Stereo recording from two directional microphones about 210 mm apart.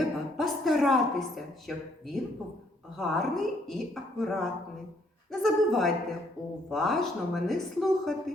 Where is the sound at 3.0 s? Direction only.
Centre (ahead or behind).